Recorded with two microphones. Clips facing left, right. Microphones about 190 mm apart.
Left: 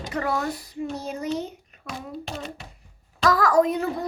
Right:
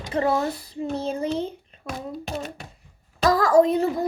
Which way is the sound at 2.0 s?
45° right (ahead or behind).